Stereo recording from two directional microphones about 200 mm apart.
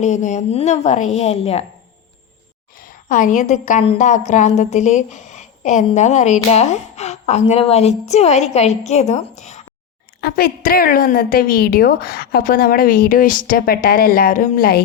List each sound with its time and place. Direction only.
0.0 s a woman's voice: 35° left (ahead or behind)
2.8 s a woman's voice: 45° left (ahead or behind)
10.2 s a woman's voice: 50° left (ahead or behind)